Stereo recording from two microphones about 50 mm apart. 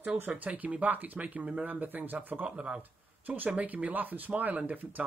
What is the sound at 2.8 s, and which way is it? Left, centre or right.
Speech, right.